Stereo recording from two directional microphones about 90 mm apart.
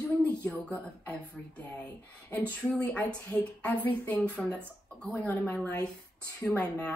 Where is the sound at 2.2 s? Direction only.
25° left (ahead or behind).